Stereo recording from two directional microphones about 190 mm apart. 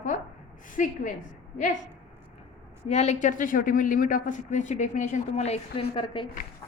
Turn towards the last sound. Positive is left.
turn(degrees=25)  # may be behind; listen again after turning